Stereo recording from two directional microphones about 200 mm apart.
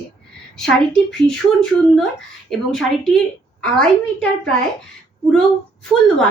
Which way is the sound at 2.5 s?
Centre (ahead or behind).